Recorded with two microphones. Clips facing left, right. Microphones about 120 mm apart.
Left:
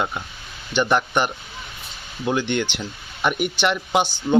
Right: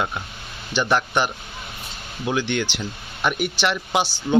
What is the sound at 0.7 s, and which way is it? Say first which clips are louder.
Speech: left 1 dB; 15° left (ahead or behind).